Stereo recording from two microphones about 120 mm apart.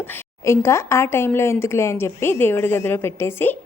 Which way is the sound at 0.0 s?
20° left (ahead or behind).